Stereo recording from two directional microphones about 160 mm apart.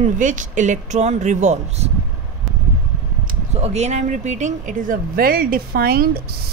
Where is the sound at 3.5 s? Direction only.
45° right (ahead or behind).